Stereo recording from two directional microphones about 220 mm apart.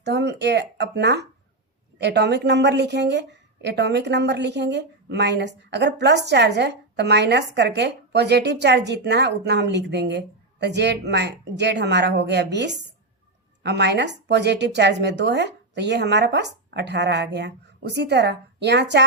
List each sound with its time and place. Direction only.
0.0 s speech: 50° right (ahead or behind)